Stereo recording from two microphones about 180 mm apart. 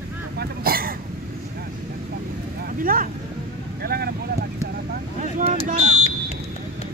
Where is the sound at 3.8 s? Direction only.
60° right (ahead or behind).